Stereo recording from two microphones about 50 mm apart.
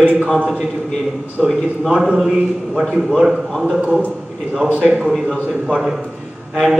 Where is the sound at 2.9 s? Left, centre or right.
Centre.